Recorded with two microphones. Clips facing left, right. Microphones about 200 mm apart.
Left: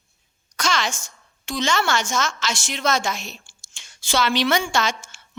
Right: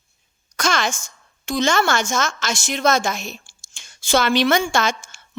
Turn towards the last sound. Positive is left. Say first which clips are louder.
# right 2 dB
turn(degrees=-50)  # may be behind; listen again after turning